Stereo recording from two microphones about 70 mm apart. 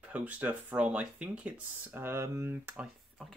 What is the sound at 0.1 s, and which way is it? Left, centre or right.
Speech, right.